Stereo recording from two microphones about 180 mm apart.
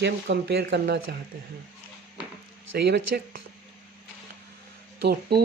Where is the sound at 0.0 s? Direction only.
70° right (ahead or behind).